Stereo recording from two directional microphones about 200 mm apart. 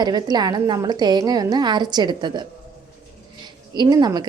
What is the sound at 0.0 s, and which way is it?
A woman's voice, 20° right (ahead or behind).